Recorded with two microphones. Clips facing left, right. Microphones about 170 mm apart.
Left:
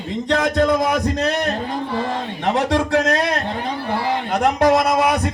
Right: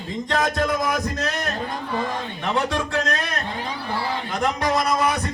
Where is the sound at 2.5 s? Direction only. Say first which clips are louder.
Left 6 dB; 75° left (ahead or behind).